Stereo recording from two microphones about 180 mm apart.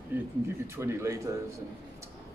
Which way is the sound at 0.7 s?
15° right (ahead or behind).